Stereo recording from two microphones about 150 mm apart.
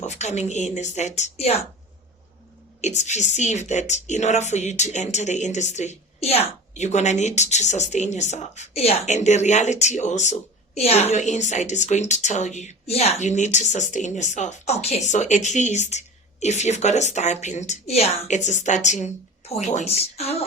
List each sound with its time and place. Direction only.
0.0 s a woman's voice: 50° left (ahead or behind)
2.8 s a woman's voice: 50° left (ahead or behind)